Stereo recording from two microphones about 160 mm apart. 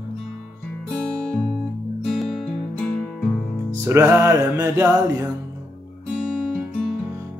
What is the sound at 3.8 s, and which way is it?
Music, 15° right (ahead or behind).